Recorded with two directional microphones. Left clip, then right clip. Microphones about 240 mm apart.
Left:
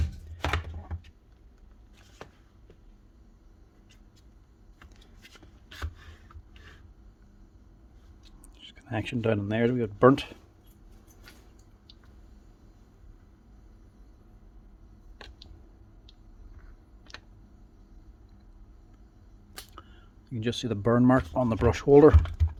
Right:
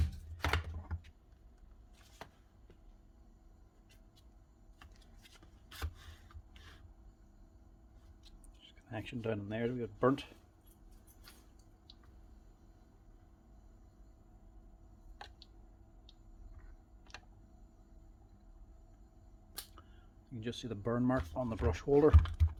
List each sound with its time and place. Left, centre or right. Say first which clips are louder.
0.4 s chopping: left 5 dB; centre
8.5 s speech: left 12 dB; left
19.7 s speech: left 10 dB; left
22.4 s computer keyboard: left 5 dB; centre